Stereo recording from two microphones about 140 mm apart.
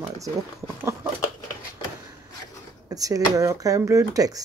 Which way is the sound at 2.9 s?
25° right (ahead or behind).